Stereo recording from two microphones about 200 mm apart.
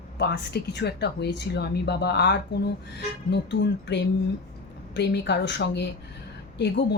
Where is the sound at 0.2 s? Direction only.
55° left (ahead or behind).